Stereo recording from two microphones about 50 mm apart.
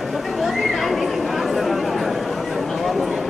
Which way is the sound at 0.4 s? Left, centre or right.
Centre.